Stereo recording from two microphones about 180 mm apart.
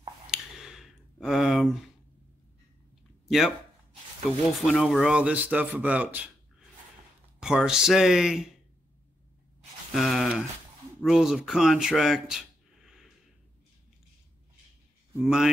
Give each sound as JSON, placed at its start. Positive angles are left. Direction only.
{"t": 0.3, "sound": "a sound", "side_deg": -5}
{"t": 1.2, "sound": "speech", "side_deg": 0}
{"t": 3.3, "sound": "speech", "side_deg": 0}
{"t": 4.6, "sound": "speech", "side_deg": 0}
{"t": 7.3, "sound": "speech", "side_deg": -5}
{"t": 9.9, "sound": "speech", "side_deg": 0}
{"t": 12.8, "sound": "a sound", "side_deg": 0}
{"t": 15.1, "sound": "speech", "side_deg": -5}